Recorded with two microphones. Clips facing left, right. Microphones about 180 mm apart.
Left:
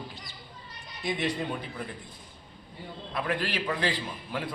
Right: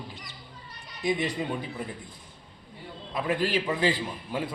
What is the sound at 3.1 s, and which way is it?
A man's voice, 20° right (ahead or behind).